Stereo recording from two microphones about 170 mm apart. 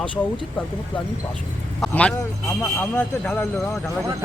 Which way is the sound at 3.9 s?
20° right (ahead or behind).